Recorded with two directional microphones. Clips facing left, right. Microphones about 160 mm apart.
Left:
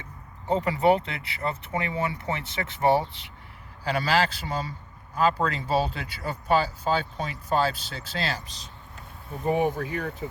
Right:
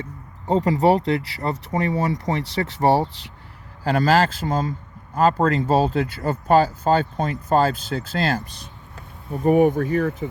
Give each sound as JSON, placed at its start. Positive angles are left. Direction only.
{"t": 0.0, "sound": "speech", "side_deg": -35}